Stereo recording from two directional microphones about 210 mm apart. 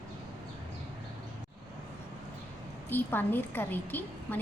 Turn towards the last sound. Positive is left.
turn(degrees=10)  # may be behind; listen again after turning